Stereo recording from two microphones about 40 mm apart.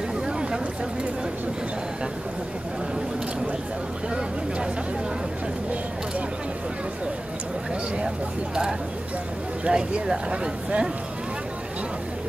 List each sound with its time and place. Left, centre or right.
9.7 s speech: right